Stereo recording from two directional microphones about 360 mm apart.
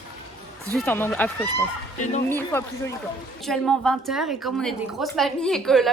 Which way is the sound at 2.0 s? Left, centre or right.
Centre.